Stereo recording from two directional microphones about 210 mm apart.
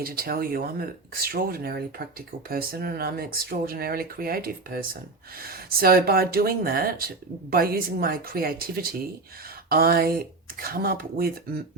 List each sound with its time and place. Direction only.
0.0 s speech: 45° right (ahead or behind)